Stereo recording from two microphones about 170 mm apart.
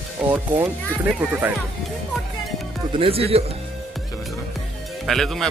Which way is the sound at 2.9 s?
35° right (ahead or behind).